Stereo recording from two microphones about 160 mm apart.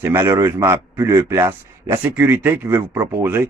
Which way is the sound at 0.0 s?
15° right (ahead or behind).